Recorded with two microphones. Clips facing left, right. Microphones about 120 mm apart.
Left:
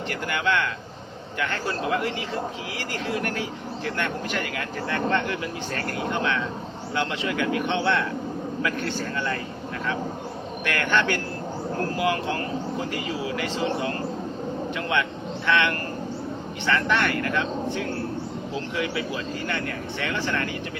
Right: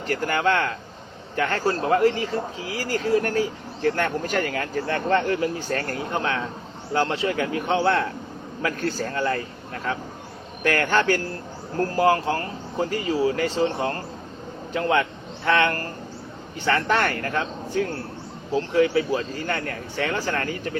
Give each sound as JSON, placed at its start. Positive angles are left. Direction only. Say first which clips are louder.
{"t": 0.1, "sound": "speech", "louder": "right 4 dB", "side_deg": -40}
{"t": 10.6, "sound": "speech", "louder": "right 3 dB", "side_deg": -40}